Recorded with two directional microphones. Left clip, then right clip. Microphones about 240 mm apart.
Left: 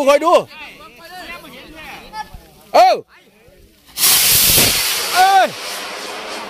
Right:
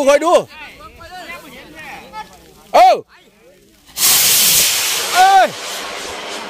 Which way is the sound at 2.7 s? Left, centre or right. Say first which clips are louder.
Right 2 dB; centre.